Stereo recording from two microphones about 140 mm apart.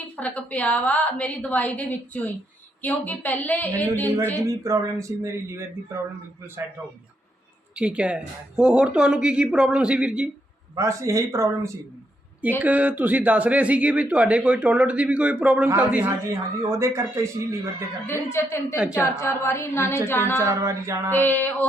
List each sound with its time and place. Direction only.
0.2 s a woman's voice: 10° left (ahead or behind)
4.6 s speech: 20° right (ahead or behind)
7.8 s speech: 10° right (ahead or behind)
10.8 s speech: 20° right (ahead or behind)
18.0 s a woman's voice: 15° left (ahead or behind)
18.8 s speech: 10° right (ahead or behind)
19.0 s a woman's voice: 20° left (ahead or behind)
20.4 s speech: 20° right (ahead or behind)
21.1 s a woman's voice: 15° left (ahead or behind)